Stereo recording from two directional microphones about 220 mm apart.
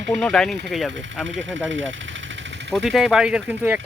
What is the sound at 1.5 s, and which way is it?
Speech, 60° right (ahead or behind).